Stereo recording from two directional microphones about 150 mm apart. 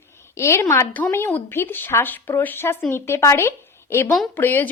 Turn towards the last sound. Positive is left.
turn(degrees=15)  # may be behind; listen again after turning